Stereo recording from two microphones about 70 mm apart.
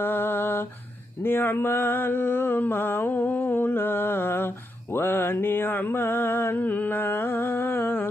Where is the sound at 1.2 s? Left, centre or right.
Left.